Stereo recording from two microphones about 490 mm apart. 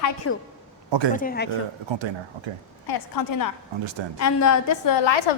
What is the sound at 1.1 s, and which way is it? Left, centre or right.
Speech, centre.